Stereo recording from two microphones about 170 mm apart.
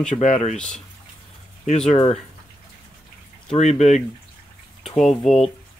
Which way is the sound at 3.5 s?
40° left (ahead or behind).